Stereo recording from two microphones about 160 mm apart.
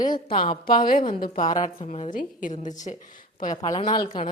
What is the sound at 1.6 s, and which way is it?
A woman's voice, 45° left (ahead or behind).